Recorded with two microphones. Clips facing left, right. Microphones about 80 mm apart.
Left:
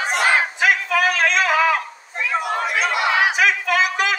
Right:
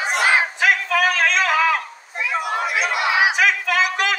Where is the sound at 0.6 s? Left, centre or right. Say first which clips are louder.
Left 1 dB; centre.